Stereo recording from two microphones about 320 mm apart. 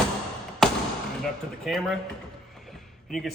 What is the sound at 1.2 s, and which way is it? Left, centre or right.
Speech, centre.